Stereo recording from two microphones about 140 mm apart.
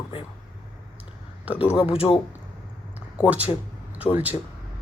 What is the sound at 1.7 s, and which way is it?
Speech, 40° left (ahead or behind).